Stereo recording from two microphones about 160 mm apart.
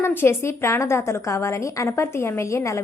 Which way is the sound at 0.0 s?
15° left (ahead or behind).